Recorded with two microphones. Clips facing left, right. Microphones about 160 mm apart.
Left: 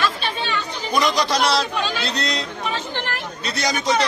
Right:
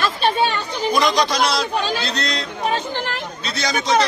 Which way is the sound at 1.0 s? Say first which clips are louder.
Even; 5° left (ahead or behind).